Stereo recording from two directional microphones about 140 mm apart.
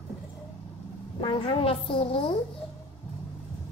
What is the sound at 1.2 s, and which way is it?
A woman's voice, 40° left (ahead or behind).